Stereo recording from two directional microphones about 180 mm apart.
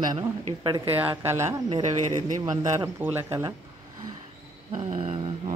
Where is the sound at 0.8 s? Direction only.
10° right (ahead or behind).